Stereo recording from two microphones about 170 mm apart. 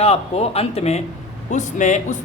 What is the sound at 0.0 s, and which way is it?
Speech, 35° left (ahead or behind).